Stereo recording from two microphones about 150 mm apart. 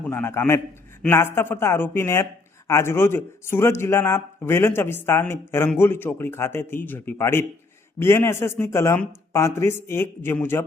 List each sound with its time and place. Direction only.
0.0 s a man's voice: 15° left (ahead or behind)